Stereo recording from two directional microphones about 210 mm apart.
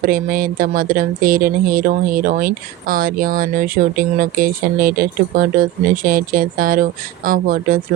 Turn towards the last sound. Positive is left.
turn(degrees=-40)  # may be behind; listen again after turning